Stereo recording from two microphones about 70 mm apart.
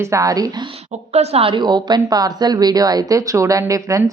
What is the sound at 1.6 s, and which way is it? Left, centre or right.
Speech, right.